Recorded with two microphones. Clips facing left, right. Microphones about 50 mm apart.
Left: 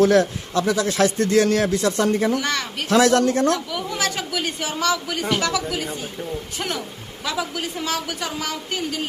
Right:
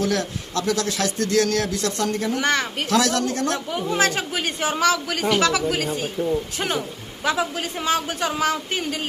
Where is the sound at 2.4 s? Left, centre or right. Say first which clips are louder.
Right 3 dB; right.